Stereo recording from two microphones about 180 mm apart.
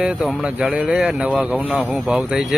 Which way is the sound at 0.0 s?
5° right (ahead or behind).